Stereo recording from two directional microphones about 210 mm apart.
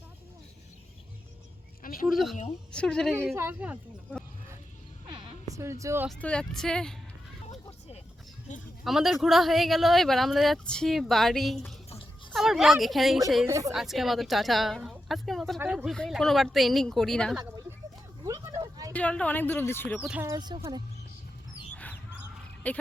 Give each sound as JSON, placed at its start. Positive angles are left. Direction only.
{"t": 1.8, "sound": "speech", "side_deg": 40}
{"t": 2.0, "sound": "speech", "side_deg": 0}
{"t": 3.2, "sound": "speech", "side_deg": -10}
{"t": 5.0, "sound": "a sound", "side_deg": -20}
{"t": 6.1, "sound": "speech", "side_deg": 5}
{"t": 8.5, "sound": "speech", "side_deg": 35}
{"t": 8.8, "sound": "speech", "side_deg": 0}
{"t": 18.2, "sound": "a sound", "side_deg": -15}
{"t": 18.9, "sound": "speech", "side_deg": 5}
{"t": 20.1, "sound": "speech", "side_deg": -10}
{"t": 20.3, "sound": "speech", "side_deg": -20}
{"t": 22.6, "sound": "speech", "side_deg": 5}